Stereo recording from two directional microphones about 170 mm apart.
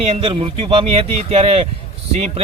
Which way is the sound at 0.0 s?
35° right (ahead or behind).